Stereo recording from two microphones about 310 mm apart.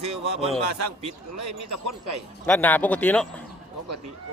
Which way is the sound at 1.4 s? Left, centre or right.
Right.